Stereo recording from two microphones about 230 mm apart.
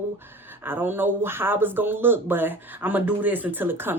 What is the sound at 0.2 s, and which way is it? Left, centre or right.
A woman's voice, centre.